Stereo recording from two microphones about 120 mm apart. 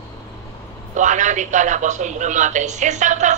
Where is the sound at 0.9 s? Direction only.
90° right.